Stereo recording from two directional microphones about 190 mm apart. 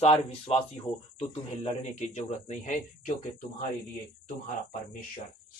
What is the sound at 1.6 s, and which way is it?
Speech, 35° left (ahead or behind).